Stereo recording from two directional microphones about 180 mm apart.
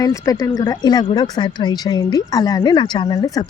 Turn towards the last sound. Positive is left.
turn(degrees=20)  # may be behind; listen again after turning